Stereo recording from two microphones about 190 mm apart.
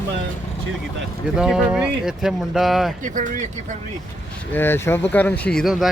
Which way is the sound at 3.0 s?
45° right (ahead or behind).